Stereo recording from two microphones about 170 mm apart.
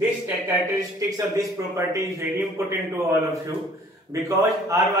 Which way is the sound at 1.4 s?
20° right (ahead or behind).